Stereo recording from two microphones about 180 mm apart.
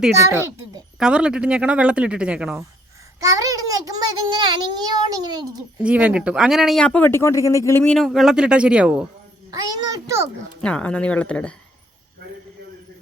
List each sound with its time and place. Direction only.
0.9 s speech: 5° right (ahead or behind)
3.2 s a sound: 20° right (ahead or behind)
4.4 s a child's voice: 25° right (ahead or behind)
5.8 s speech: 5° right (ahead or behind); by 7.9 s 15° left (ahead or behind)
7.9 s speech: centre (ahead or behind)
9.5 s a sound: 20° right (ahead or behind)
10.6 s speech: 5° left (ahead or behind)